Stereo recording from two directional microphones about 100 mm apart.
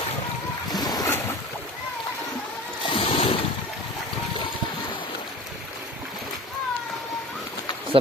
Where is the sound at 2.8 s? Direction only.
65° left (ahead or behind).